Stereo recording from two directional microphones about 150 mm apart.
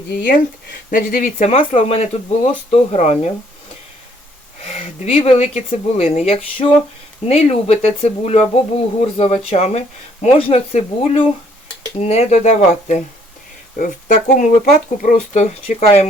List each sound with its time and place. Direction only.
0.2 s speech: 70° left (ahead or behind); by 3.3 s 50° left (ahead or behind)
4.6 s speech: 45° left (ahead or behind)
14.3 s speech: 60° left (ahead or behind)